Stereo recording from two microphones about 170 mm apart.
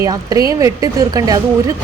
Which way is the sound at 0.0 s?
20° right (ahead or behind).